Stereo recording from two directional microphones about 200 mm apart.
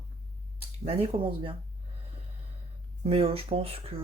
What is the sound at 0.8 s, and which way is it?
Speech, 25° right (ahead or behind).